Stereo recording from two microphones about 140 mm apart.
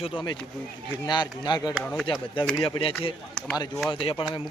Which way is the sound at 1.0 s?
30° left (ahead or behind).